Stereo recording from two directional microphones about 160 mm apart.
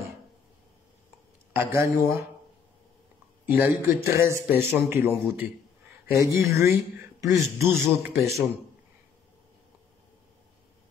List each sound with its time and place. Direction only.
1.5 s a man's voice: 15° right (ahead or behind)
3.4 s a man's voice: 15° right (ahead or behind)